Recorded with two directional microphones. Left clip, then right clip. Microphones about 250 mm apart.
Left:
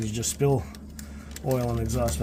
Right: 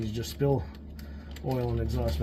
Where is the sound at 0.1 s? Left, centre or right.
Left.